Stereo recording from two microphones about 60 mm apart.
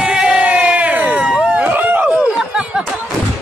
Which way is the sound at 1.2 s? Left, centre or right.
Centre.